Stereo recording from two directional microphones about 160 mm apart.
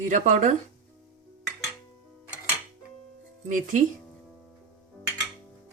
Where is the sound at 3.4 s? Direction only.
50° right (ahead or behind).